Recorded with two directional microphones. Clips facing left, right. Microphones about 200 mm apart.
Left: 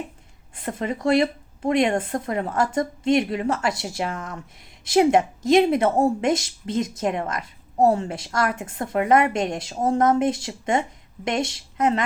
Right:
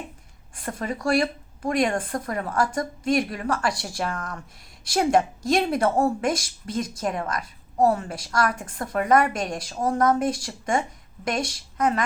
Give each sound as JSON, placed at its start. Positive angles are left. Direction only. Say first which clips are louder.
{"t": 0.5, "sound": "a woman's voice", "louder": "left 3 dB", "side_deg": 20}